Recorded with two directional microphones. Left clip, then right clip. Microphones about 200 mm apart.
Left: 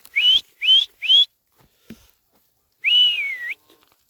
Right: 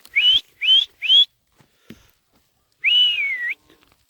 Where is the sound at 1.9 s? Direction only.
35° left (ahead or behind).